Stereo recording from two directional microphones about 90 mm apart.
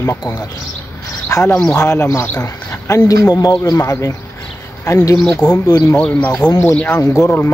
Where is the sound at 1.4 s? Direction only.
20° left (ahead or behind).